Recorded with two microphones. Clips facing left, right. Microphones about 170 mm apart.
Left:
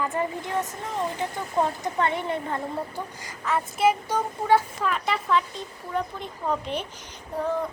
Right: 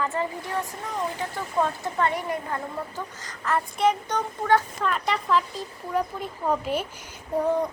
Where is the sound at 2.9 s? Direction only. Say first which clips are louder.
Left 1 dB; 10° left (ahead or behind).